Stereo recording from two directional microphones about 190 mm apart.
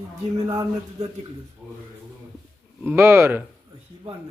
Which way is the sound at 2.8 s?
10° right (ahead or behind).